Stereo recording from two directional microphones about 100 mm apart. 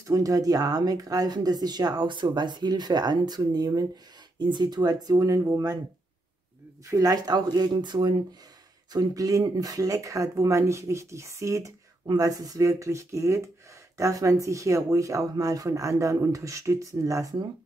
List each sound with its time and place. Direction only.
0.0 s speech: 35° right (ahead or behind)
6.9 s speech: 35° right (ahead or behind)
8.9 s speech: 35° right (ahead or behind)